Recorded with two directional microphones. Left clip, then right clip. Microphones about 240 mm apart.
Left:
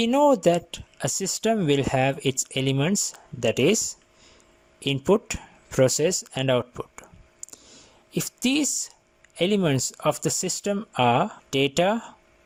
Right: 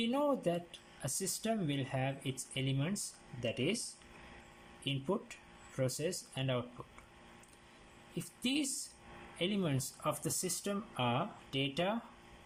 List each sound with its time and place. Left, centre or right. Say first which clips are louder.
0.0 s a woman's voice: left 15 dB; left
4.8 s speech: left 16 dB; left
8.1 s a woman's voice: left 12 dB; left